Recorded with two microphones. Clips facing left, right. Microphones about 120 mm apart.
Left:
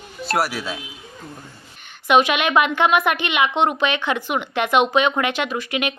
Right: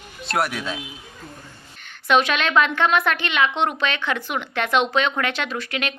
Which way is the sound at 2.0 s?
15° left (ahead or behind).